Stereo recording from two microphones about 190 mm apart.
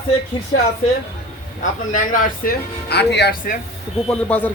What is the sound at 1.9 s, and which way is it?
Speech, 45° left (ahead or behind).